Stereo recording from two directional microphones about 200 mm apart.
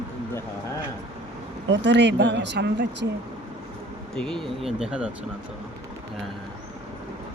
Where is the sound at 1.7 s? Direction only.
60° right (ahead or behind).